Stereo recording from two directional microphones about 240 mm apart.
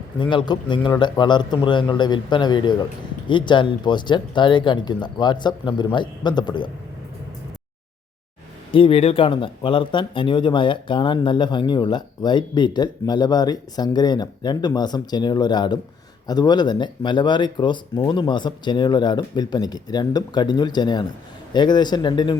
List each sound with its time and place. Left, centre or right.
0.2 s speech: centre
8.7 s speech: left